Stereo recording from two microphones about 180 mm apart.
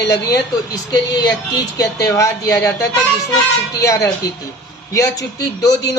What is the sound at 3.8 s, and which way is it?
Speech, 15° left (ahead or behind).